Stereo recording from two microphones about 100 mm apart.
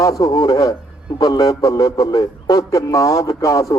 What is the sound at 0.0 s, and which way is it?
A man's voice, 35° left (ahead or behind).